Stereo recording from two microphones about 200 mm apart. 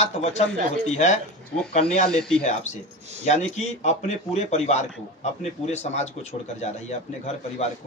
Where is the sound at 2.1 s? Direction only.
5° left (ahead or behind).